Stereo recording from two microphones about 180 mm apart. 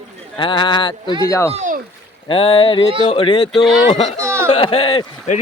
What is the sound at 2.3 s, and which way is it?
Speech, 30° left (ahead or behind).